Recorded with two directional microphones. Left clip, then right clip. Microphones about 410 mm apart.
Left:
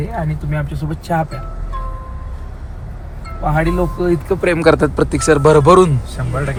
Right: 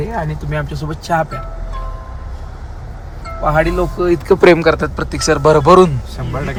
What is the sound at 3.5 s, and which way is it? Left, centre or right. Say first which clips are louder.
Speech: right 3 dB; centre.